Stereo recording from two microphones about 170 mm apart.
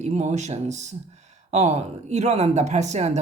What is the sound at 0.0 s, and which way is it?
Speech, 40° right (ahead or behind).